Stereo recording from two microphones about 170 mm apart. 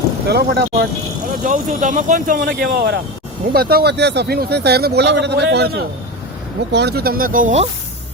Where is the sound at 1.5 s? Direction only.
50° right (ahead or behind); by 3.0 s 75° right (ahead or behind).